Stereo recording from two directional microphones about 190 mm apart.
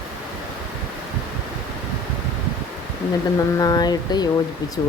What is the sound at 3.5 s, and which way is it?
Speech, 20° left (ahead or behind).